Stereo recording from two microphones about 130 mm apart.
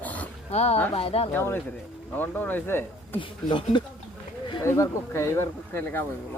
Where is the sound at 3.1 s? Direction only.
40° left (ahead or behind).